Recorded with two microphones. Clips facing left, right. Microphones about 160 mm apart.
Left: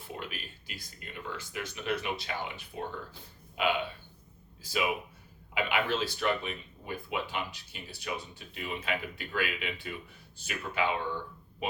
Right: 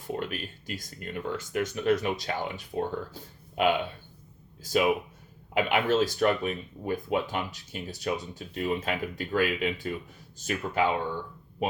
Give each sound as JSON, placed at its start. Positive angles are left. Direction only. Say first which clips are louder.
{"t": 0.2, "sound": "speech", "louder": "right 8 dB", "side_deg": -50}